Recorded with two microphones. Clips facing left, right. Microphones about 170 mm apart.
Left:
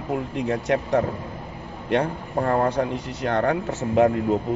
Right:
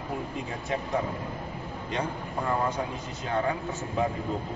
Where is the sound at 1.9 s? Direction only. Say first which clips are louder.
Left 9 dB; 60° left (ahead or behind).